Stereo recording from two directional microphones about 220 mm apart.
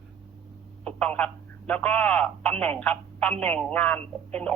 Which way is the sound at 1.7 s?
5° left (ahead or behind).